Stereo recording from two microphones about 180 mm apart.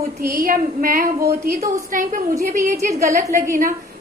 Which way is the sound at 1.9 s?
50° right (ahead or behind).